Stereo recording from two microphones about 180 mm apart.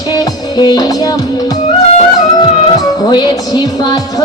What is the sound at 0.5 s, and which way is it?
Music, 20° left (ahead or behind).